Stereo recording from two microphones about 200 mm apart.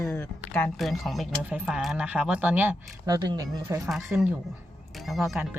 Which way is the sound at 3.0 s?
20° right (ahead or behind).